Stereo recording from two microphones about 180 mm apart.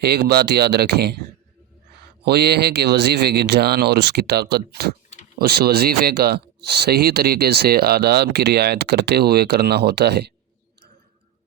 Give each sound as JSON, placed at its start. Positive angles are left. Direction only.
{"t": 0.0, "sound": "speech", "side_deg": -60}
{"t": 2.2, "sound": "speech", "side_deg": -65}